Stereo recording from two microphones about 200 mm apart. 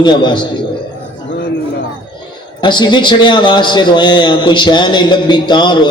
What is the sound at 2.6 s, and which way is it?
A man's voice, 20° left (ahead or behind).